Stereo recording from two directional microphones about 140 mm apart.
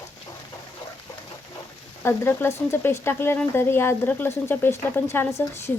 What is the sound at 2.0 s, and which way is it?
Speech, 15° left (ahead or behind).